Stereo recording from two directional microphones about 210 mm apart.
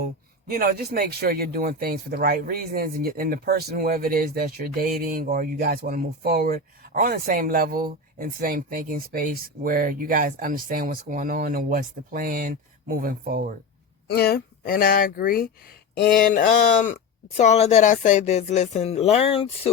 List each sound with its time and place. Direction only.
0.5 s speech: 45° right (ahead or behind)
14.1 s speech: 50° left (ahead or behind); by 19.7 s 25° left (ahead or behind)